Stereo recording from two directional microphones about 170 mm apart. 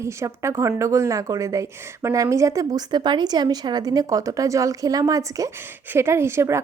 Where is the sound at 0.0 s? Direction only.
15° right (ahead or behind).